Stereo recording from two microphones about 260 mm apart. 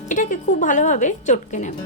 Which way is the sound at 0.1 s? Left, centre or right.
Left.